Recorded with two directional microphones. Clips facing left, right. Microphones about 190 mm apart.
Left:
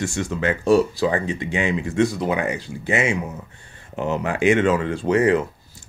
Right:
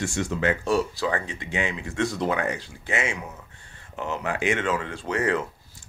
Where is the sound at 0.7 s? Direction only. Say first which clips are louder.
Left 12 dB; 20° left (ahead or behind).